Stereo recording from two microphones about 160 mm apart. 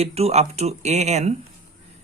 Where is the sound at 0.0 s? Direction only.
40° right (ahead or behind).